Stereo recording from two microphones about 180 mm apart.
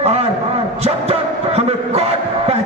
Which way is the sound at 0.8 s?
35° right (ahead or behind).